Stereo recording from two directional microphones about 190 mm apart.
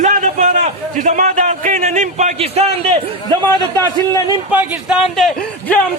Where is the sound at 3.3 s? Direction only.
25° right (ahead or behind).